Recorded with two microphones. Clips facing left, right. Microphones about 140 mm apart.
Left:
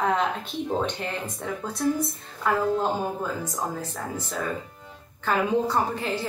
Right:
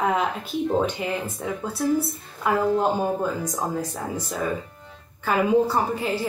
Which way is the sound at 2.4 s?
15° right (ahead or behind).